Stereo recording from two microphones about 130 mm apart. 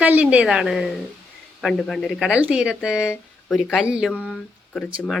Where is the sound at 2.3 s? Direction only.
10° right (ahead or behind).